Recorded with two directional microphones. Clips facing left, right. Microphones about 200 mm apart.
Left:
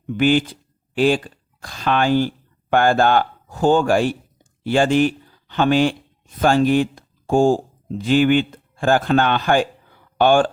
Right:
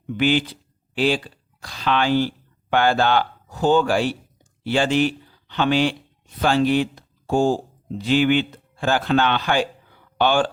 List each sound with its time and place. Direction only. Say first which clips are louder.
0.2 s speech: left 3 dB; 50° left (ahead or behind)